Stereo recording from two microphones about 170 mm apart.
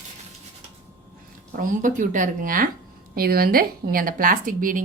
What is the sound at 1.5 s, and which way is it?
Speech, 50° right (ahead or behind).